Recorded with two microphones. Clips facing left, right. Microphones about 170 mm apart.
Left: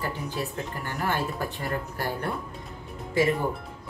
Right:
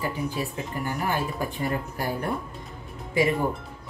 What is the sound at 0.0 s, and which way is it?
Speech, 10° right (ahead or behind).